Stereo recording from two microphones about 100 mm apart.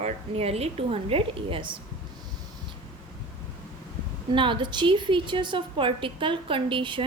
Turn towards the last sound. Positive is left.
turn(degrees=-55)  # may be behind; listen again after turning